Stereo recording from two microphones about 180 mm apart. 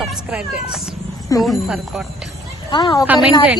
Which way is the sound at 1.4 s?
Centre (ahead or behind).